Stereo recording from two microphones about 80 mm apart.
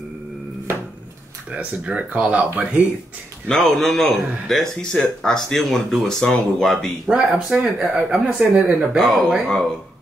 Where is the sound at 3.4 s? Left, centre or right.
Centre.